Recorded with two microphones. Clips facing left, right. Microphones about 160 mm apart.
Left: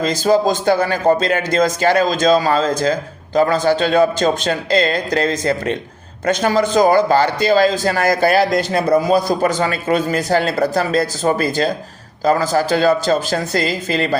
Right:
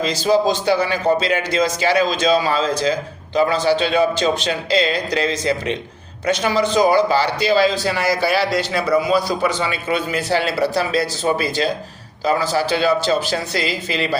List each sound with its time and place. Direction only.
0.0 s speech: 45° left (ahead or behind)